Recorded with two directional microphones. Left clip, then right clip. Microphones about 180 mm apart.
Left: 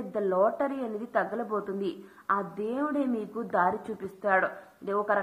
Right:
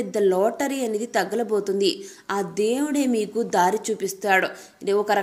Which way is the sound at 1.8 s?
20° right (ahead or behind).